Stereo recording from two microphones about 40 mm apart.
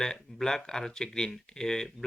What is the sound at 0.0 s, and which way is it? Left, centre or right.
Speech, centre.